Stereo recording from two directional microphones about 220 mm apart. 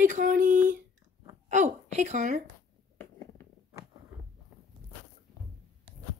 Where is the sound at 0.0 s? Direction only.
35° right (ahead or behind).